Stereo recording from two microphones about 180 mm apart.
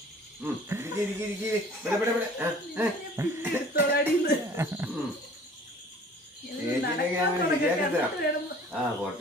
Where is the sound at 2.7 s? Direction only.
10° right (ahead or behind).